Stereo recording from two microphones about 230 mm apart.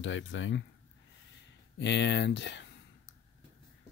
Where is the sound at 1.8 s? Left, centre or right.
Left.